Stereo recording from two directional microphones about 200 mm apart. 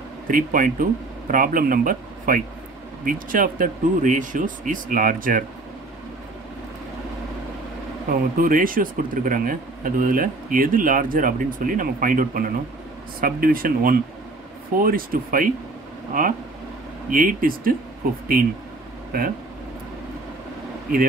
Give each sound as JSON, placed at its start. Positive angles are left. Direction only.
{"t": 0.3, "sound": "speech", "side_deg": -40}
{"t": 8.1, "sound": "speech", "side_deg": -45}
{"t": 19.1, "sound": "speech", "side_deg": -50}